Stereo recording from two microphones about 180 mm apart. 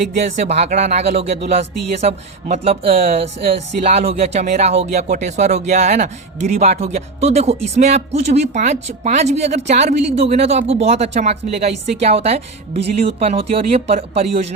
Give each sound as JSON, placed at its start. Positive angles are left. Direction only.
{"t": 0.4, "sound": "speech", "side_deg": -35}